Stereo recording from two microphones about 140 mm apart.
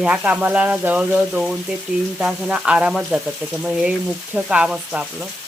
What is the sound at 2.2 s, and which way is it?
Speech, 5° right (ahead or behind).